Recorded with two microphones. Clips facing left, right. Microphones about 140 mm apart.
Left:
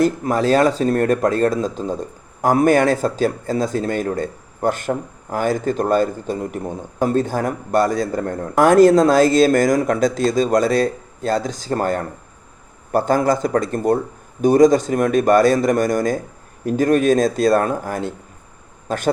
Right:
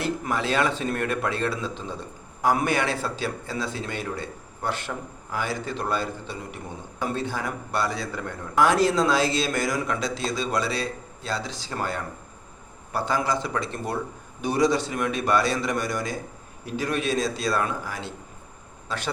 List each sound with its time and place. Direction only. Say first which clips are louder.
0.0 s speech: left 10 dB; 40° left (ahead or behind)